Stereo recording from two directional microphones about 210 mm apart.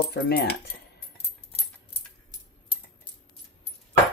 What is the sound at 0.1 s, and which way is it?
Speech, 50° left (ahead or behind).